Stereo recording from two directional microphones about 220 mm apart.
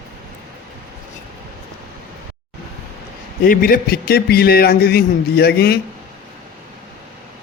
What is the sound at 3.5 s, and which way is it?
A man's voice, 40° left (ahead or behind).